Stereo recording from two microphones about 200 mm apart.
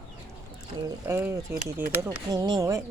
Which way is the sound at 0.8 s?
10° right (ahead or behind).